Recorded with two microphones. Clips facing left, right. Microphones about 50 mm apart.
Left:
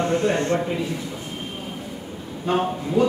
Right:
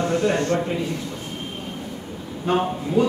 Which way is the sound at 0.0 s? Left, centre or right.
Left.